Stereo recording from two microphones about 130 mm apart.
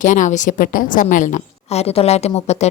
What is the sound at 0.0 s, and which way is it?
A woman's voice, 80° left.